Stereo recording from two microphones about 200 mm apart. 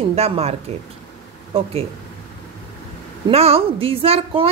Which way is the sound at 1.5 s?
30° right (ahead or behind).